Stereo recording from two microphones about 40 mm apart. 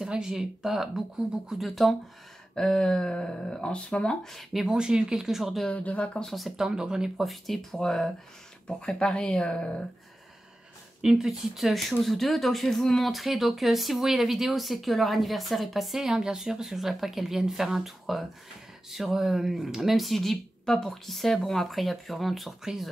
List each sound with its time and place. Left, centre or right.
0.0 s speech: centre
1.6 s speech: centre
2.5 s speech: centre
4.6 s speech: centre
5.7 s speech: left
6.2 s speech: centre
6.5 s speech: centre
7.2 s speech: centre
9.1 s speech: left
11.1 s speech: centre
13.1 s speech: centre